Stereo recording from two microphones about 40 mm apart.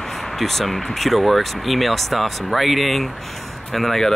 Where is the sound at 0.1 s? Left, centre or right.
Centre.